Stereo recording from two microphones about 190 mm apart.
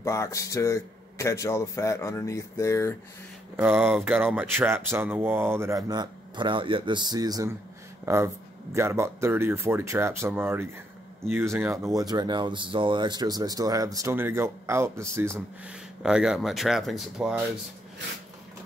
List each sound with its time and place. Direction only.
0.0 s speech: 15° left (ahead or behind)
3.5 s speech: 10° right (ahead or behind)